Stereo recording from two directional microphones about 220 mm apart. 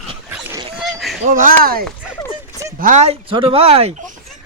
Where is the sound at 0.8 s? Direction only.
Centre (ahead or behind).